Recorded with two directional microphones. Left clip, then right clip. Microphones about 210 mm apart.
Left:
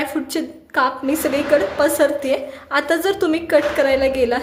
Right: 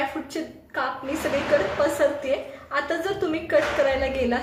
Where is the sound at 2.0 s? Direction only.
45° left (ahead or behind).